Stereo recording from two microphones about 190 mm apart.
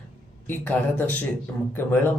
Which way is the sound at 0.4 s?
10° left (ahead or behind).